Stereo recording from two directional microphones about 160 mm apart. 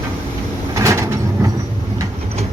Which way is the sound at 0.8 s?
20° right (ahead or behind).